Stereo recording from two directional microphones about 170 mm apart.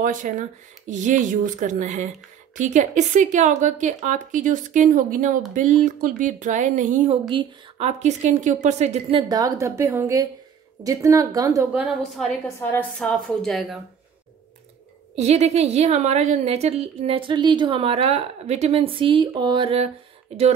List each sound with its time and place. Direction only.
0.0 s speech: 50° right (ahead or behind)
7.2 s a woman's voice: 30° right (ahead or behind)
9.3 s speech: 20° right (ahead or behind)
11.7 s a woman's voice: centre (ahead or behind)
15.1 s a woman's voice: 40° right (ahead or behind)